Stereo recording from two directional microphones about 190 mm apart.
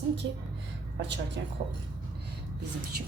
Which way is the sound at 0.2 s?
75° right (ahead or behind).